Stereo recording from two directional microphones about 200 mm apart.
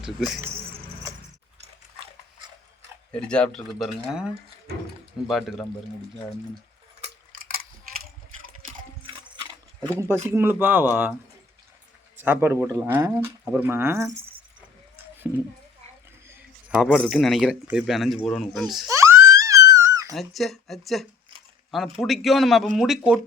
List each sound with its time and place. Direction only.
0.0 s speech: centre (ahead or behind)
3.1 s speech: 5° left (ahead or behind)
5.3 s speech: centre (ahead or behind)
9.0 s a sound: 25° right (ahead or behind)
10.0 s speech: 10° right (ahead or behind)
12.1 s speech: 10° right (ahead or behind)
14.9 s a sound: 10° right (ahead or behind)
16.9 s speech: 5° left (ahead or behind)
18.9 s screaming: 15° right (ahead or behind)
19.2 s a sound: 15° right (ahead or behind)
20.1 s speech: centre (ahead or behind)